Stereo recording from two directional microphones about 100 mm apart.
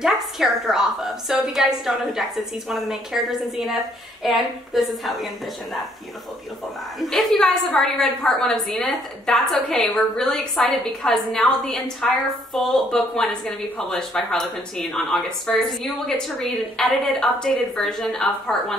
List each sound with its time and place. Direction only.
0.0 s a woman's voice: 5° right (ahead or behind)
7.0 s a woman's voice: centre (ahead or behind)